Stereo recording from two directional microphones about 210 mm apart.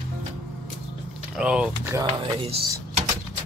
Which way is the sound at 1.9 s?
25° right (ahead or behind).